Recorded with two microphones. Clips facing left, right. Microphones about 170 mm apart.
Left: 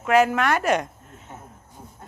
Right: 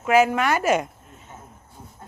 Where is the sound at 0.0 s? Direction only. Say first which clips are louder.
Even; centre (ahead or behind).